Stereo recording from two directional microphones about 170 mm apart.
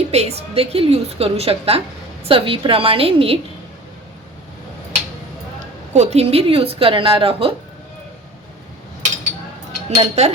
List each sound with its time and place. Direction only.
0.1 s a woman's voice: 40° right (ahead or behind)
5.5 s speech: 40° right (ahead or behind)
9.9 s a woman's voice: 40° right (ahead or behind)